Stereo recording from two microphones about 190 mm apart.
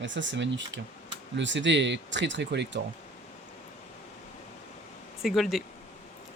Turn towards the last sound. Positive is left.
turn(degrees=0)  # may be behind; listen again after turning